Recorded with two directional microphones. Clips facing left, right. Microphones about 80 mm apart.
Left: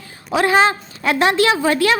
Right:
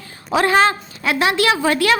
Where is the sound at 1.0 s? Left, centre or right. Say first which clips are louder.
Left 2 dB; left.